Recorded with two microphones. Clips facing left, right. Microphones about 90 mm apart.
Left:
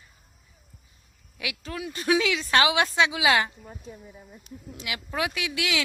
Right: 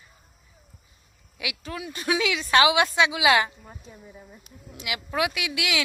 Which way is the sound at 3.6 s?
10° right (ahead or behind).